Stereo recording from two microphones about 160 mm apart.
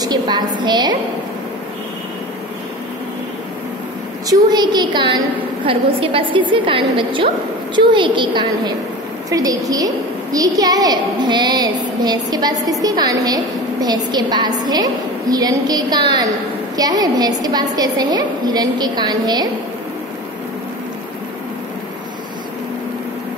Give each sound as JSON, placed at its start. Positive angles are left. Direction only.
{"t": 0.0, "sound": "a woman's voice", "side_deg": -25}
{"t": 4.3, "sound": "a woman's voice", "side_deg": -25}